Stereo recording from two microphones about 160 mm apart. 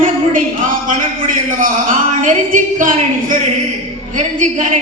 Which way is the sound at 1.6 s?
55° right (ahead or behind).